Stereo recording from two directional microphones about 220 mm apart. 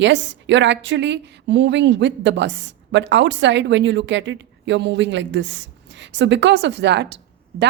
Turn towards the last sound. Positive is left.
turn(degrees=-50)  # may be behind; listen again after turning